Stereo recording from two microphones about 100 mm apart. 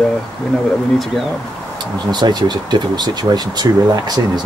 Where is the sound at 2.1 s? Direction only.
45° right (ahead or behind).